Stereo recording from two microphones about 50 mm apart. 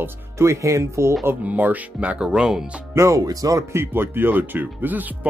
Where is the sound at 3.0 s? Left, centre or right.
Right.